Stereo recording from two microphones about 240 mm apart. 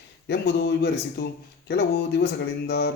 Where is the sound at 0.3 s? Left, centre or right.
Left.